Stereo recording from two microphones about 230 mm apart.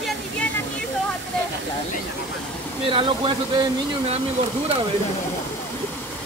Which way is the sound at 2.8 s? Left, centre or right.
Right.